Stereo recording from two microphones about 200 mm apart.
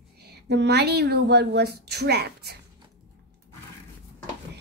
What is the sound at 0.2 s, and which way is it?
A woman's voice, 55° right (ahead or behind).